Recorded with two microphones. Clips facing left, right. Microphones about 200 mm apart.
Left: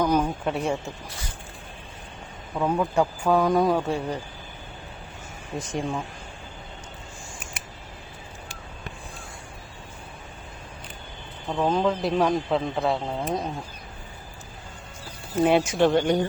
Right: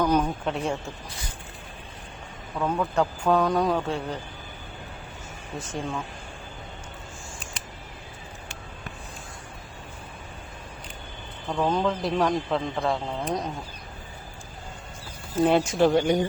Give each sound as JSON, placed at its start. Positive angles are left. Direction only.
{"t": 0.0, "sound": "speech", "side_deg": 10}
{"t": 2.6, "sound": "speech", "side_deg": 10}
{"t": 5.5, "sound": "speech", "side_deg": 15}
{"t": 11.6, "sound": "speech", "side_deg": 5}
{"t": 15.4, "sound": "speech", "side_deg": 5}